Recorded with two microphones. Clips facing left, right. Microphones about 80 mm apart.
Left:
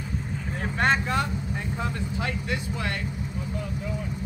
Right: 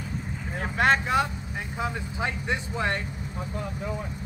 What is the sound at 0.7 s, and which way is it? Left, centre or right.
Speech, centre.